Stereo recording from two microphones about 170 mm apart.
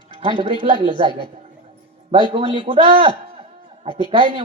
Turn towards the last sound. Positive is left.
turn(degrees=-30)  # may be behind; listen again after turning